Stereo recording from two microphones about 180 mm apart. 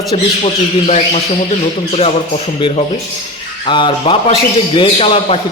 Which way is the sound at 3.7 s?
25° left (ahead or behind).